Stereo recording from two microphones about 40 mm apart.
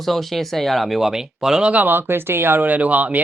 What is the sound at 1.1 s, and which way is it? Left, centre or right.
Speech, centre.